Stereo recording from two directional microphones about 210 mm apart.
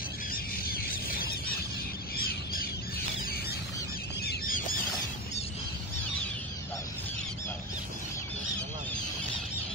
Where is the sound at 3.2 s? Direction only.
45° left (ahead or behind).